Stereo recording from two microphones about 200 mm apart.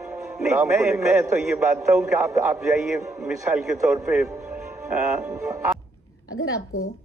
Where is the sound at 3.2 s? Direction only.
5° right (ahead or behind).